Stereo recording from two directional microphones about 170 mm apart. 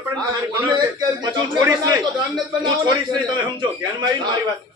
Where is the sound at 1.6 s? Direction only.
15° right (ahead or behind).